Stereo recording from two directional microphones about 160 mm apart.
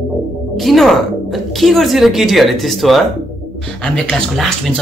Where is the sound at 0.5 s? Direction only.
Centre (ahead or behind).